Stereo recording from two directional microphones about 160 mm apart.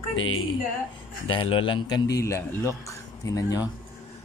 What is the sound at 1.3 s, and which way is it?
A man's voice, 35° left (ahead or behind).